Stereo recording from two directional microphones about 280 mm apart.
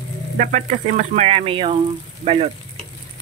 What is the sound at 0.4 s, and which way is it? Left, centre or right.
Speech, right.